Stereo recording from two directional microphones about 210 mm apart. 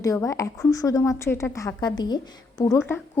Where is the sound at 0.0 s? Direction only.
15° left (ahead or behind).